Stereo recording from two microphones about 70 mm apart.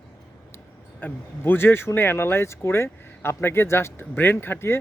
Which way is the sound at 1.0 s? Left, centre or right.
Left.